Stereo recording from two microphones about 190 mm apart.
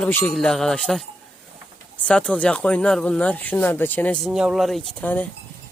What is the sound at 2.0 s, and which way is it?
Speech, 5° left (ahead or behind).